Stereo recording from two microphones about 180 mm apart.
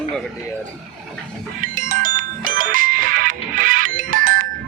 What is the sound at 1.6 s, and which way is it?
Music, 50° right (ahead or behind).